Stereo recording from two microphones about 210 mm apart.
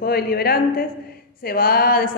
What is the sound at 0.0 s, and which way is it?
A woman's voice, 45° left (ahead or behind).